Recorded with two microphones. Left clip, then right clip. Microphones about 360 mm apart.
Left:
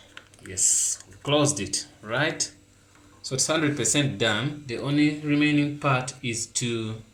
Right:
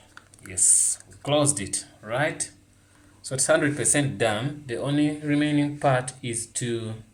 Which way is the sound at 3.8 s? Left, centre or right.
Right.